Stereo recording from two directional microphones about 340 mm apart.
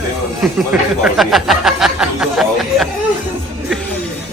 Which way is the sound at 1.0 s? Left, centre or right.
Centre.